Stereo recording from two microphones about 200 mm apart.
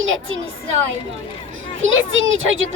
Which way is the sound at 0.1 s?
75° right (ahead or behind).